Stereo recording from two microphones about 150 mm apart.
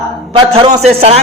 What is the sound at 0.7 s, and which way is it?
Speech, 50° right (ahead or behind).